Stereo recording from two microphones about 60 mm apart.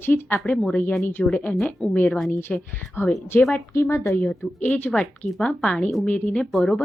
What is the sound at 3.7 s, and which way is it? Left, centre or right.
Speech, left.